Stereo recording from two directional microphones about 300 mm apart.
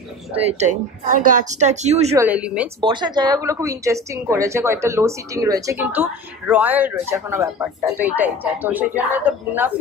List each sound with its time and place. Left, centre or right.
0.5 s speech: right
2.1 s speech: centre
2.8 s a woman's voice: centre